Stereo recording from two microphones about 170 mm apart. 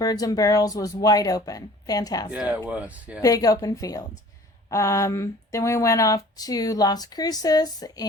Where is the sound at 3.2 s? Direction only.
20° left (ahead or behind).